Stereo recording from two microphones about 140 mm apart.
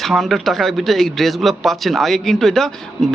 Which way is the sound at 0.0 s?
Centre (ahead or behind).